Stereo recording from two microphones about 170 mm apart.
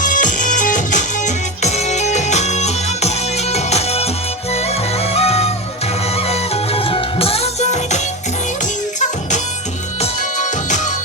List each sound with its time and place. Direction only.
0.0 s music: 50° left (ahead or behind)
10.0 s music: 45° left (ahead or behind)